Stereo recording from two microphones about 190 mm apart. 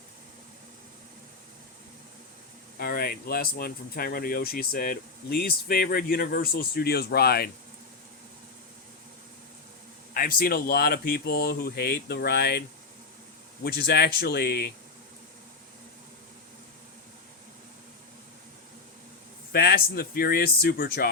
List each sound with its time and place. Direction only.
2.7 s speech: 50° left (ahead or behind)
10.2 s speech: 50° left (ahead or behind)
13.7 s speech: 55° left (ahead or behind)
19.5 s speech: 50° left (ahead or behind)